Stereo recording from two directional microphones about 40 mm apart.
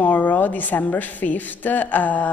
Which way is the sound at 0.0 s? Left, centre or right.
Left.